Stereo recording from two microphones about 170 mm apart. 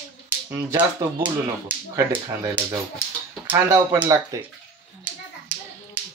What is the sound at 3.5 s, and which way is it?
Speech, 15° right (ahead or behind).